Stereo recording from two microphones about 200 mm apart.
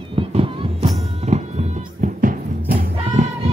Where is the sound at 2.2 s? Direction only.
45° right (ahead or behind).